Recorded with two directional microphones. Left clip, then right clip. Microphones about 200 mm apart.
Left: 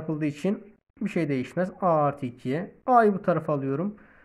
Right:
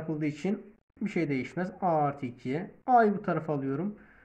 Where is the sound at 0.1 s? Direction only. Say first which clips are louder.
Left 4 dB; 40° left (ahead or behind).